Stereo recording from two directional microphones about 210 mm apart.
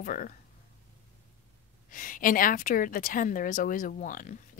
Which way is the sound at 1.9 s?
40° left (ahead or behind).